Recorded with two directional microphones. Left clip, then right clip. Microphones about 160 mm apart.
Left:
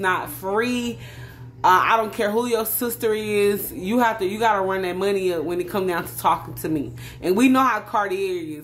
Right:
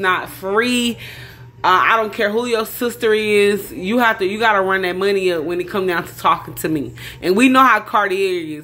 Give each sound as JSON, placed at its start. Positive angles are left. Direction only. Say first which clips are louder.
{"t": 0.0, "sound": "speech", "louder": "right 4 dB", "side_deg": -10}
{"t": 0.7, "sound": "speech", "louder": "right 7 dB", "side_deg": -20}
{"t": 1.6, "sound": "speech", "louder": "right 3 dB", "side_deg": -10}